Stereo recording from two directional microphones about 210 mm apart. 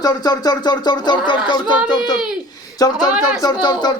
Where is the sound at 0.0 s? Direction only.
20° left (ahead or behind).